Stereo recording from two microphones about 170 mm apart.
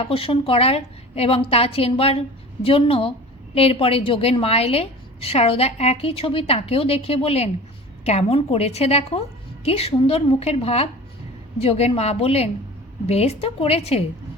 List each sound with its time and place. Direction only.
0.0 s a woman's voice: 35° left (ahead or behind)